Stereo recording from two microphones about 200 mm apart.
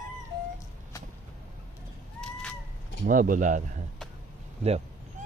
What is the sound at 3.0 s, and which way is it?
Speech, 45° right (ahead or behind).